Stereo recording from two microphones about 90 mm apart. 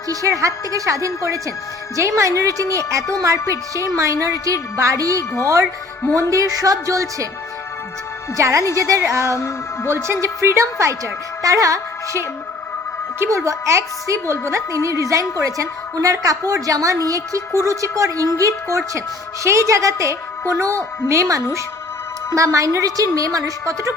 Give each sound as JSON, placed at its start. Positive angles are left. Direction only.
{"t": 0.1, "sound": "a woman's voice", "side_deg": -40}
{"t": 6.3, "sound": "a woman's voice", "side_deg": -40}
{"t": 8.4, "sound": "a woman's voice", "side_deg": -35}
{"t": 9.3, "sound": "speech", "side_deg": 30}
{"t": 9.9, "sound": "a woman's voice", "side_deg": -30}